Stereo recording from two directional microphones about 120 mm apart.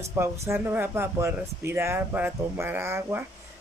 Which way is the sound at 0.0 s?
20° right (ahead or behind).